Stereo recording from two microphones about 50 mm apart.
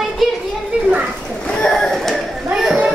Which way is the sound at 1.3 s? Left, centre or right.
Centre.